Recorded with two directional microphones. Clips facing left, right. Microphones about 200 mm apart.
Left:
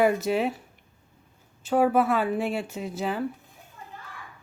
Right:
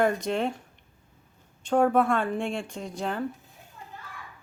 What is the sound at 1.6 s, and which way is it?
A woman's voice, 5° left (ahead or behind).